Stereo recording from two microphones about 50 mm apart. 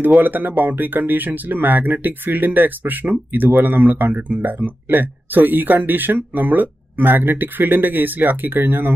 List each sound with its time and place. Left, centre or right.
0.2 s speech: right